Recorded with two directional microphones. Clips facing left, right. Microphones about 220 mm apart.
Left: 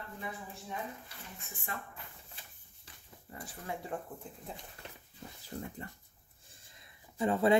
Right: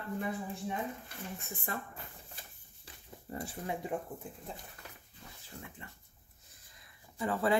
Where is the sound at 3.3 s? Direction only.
40° right (ahead or behind).